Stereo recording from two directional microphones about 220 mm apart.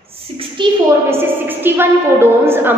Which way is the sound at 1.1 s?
10° right (ahead or behind).